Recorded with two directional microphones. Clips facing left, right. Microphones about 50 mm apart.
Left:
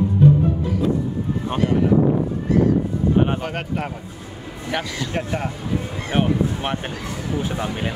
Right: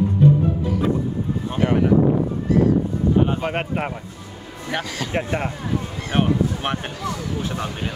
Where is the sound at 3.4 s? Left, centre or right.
Right.